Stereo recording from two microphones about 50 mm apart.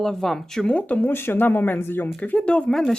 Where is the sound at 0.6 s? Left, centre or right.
Left.